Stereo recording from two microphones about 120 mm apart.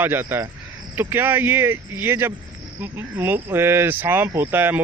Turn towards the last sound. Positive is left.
turn(degrees=-15)  # may be behind; listen again after turning